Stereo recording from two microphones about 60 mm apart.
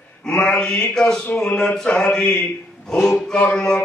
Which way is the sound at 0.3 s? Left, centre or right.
Centre.